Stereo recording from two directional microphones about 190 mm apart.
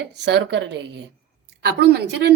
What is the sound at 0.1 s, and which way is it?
A woman's voice, 65° right (ahead or behind).